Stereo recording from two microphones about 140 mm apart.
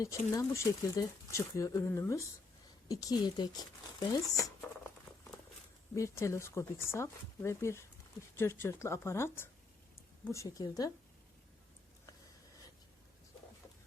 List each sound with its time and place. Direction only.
0.0 s speech: 20° left (ahead or behind)
4.4 s a sound: 20° left (ahead or behind)
5.9 s speech: 20° left (ahead or behind)